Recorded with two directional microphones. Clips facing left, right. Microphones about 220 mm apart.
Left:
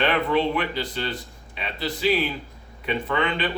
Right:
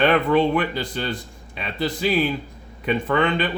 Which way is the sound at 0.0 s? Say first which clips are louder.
Right 4 dB; 50° right (ahead or behind).